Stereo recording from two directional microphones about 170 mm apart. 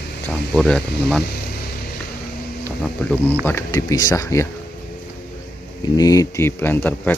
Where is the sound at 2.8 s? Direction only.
5° left (ahead or behind).